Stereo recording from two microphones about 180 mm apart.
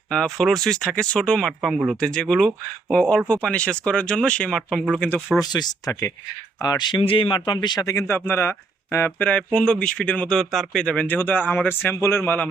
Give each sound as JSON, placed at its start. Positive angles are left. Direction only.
{"t": 0.1, "sound": "speech", "side_deg": 5}
{"t": 5.5, "sound": "speech", "side_deg": 25}